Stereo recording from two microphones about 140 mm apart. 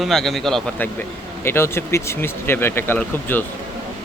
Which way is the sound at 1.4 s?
15° left (ahead or behind).